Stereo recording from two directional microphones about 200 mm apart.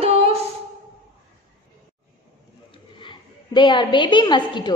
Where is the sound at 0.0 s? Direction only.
30° right (ahead or behind).